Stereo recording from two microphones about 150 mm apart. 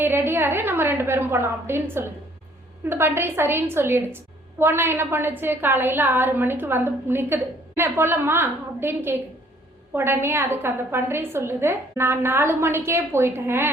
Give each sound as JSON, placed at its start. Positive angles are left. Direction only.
{"t": 0.0, "sound": "a woman's voice", "side_deg": -15}